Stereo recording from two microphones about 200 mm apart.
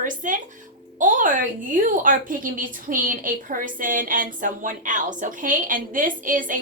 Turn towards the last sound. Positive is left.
turn(degrees=-40)  # may be behind; listen again after turning